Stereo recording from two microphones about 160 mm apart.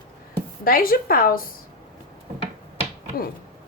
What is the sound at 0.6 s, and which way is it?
Speech, 65° left (ahead or behind).